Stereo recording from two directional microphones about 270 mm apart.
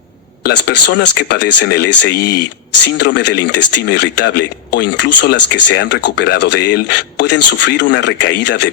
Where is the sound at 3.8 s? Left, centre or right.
Left.